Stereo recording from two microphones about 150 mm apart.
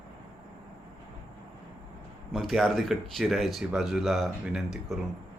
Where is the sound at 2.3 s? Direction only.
Centre (ahead or behind).